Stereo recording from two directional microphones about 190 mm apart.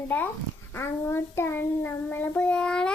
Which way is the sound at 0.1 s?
5° left (ahead or behind).